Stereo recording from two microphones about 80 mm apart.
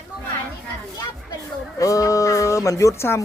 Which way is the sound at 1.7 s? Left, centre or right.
Left.